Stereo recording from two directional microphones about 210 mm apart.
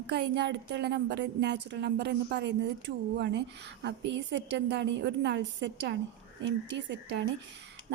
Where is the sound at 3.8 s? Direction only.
55° right (ahead or behind).